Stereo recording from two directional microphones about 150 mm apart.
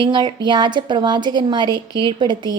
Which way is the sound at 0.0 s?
30° right (ahead or behind).